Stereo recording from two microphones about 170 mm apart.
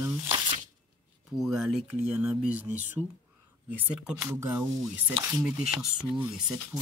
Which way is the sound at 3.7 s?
5° right (ahead or behind).